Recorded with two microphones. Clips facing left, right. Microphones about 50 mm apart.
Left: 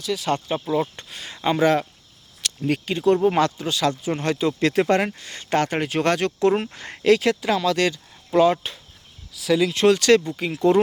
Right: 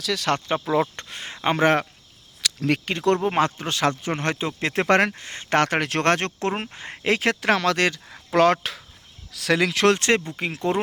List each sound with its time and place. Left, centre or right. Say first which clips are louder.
0.0 s speech: even; right
0.3 s speech: right 1 dB; right
2.6 s speech: even; right
3.2 s speech: left 3 dB; right
3.6 s speech: even; right
5.2 s speech: right 1 dB; right
5.5 s speech: right 1 dB; right
6.7 s speech: even; centre
7.0 s speech: left 4 dB; right
8.1 s a sound: left 1 dB; right
9.3 s speech: left 1 dB; right
9.9 s speech: left 4 dB; right